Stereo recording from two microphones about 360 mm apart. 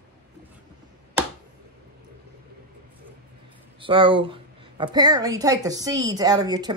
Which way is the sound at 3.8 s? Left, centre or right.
Centre.